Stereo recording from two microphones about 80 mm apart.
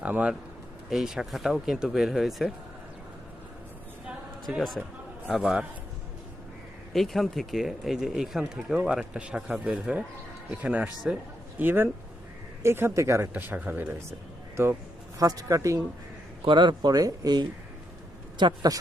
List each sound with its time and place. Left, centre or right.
0.0 s speech: centre
0.9 s speech: centre
4.4 s speech: centre
5.3 s speech: centre
6.9 s a man's voice: centre; by 13.3 s right
13.3 s a man's voice: right
15.2 s speech: right
16.5 s speech: right
16.9 s speech: right
18.4 s speech: right